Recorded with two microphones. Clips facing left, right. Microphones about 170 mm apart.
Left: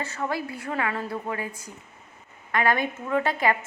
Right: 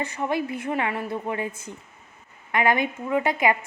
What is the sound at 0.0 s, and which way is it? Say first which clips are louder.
A woman's voice: right 3 dB; 15° right (ahead or behind).